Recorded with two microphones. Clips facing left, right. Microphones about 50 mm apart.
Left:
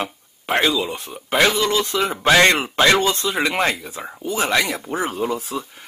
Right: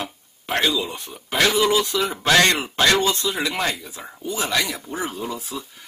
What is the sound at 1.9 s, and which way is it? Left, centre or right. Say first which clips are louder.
Speech: left 3 dB; left.